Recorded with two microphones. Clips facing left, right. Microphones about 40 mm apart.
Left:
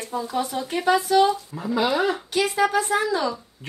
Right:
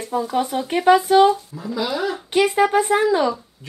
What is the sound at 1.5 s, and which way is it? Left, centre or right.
Speech, left.